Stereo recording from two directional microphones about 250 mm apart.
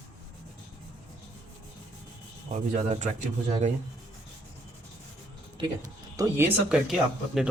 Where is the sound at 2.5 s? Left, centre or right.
Right.